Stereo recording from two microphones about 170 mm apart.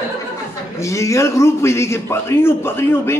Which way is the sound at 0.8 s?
15° left (ahead or behind).